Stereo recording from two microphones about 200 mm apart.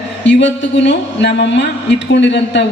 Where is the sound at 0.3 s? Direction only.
65° left (ahead or behind).